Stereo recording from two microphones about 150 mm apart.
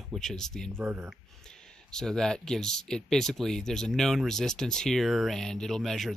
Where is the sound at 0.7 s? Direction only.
15° right (ahead or behind).